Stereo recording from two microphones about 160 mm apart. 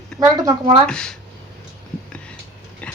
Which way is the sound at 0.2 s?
20° right (ahead or behind).